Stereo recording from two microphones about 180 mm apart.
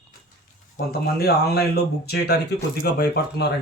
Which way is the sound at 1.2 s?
65° left (ahead or behind).